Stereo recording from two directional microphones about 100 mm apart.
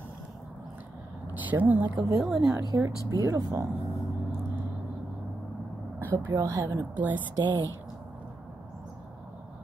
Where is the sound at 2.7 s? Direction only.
35° right (ahead or behind).